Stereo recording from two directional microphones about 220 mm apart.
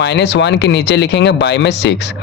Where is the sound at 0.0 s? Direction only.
50° left (ahead or behind).